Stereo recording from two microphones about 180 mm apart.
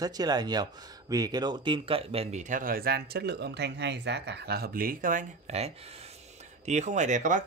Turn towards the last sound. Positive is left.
turn(degrees=-45)  # may be behind; listen again after turning